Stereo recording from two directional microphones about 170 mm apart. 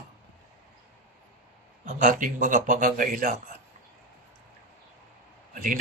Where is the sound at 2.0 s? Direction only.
50° right (ahead or behind).